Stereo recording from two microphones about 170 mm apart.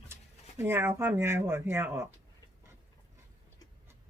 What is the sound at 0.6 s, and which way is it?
Speech, 15° right (ahead or behind).